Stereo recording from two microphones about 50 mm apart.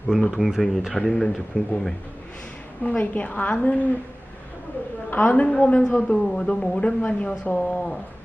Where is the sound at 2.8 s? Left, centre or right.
Left.